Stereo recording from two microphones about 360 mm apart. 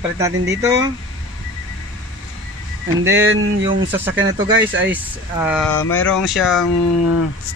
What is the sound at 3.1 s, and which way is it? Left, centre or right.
Speech, right.